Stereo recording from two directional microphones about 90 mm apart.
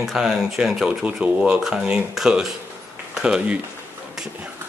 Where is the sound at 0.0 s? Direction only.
5° right (ahead or behind).